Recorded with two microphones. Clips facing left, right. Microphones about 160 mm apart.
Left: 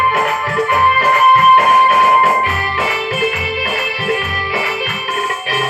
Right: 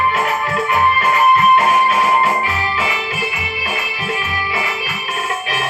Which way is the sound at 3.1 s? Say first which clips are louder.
Left 7 dB; 55° left (ahead or behind).